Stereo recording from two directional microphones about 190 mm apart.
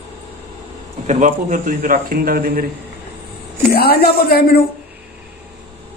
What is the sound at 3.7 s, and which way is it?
Speech, 55° left (ahead or behind).